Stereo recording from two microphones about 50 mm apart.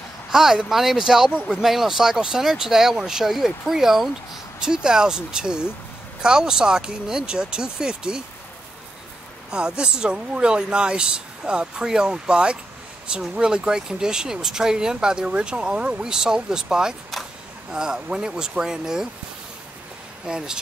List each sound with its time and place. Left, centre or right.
0.3 s speech: centre
9.5 s speech: centre
20.2 s speech: centre